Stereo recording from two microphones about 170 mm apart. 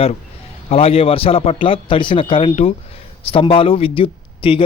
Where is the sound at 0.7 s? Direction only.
35° left (ahead or behind).